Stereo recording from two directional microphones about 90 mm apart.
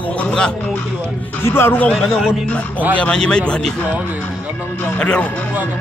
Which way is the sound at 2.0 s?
5° right (ahead or behind).